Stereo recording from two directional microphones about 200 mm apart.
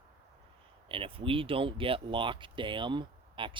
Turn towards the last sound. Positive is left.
turn(degrees=-25)  # may be behind; listen again after turning